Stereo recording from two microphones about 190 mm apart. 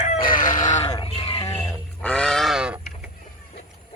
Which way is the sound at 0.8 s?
20° left (ahead or behind).